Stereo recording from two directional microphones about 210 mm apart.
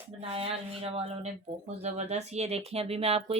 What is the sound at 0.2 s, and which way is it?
Speech, 25° right (ahead or behind).